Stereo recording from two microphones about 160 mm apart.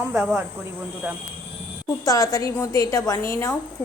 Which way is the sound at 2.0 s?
20° left (ahead or behind).